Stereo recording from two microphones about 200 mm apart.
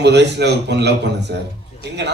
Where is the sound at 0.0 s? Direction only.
60° right (ahead or behind).